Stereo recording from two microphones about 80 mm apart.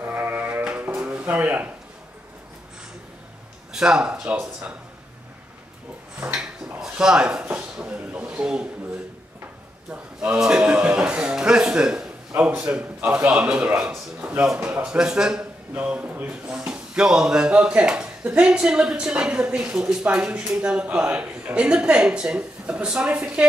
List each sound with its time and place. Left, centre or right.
0.0 s music: right
3.7 s speech: centre
6.8 s speech: centre
7.7 s a sound: centre
9.8 s speech: centre
13.0 s a man's voice: right
13.3 s speech: centre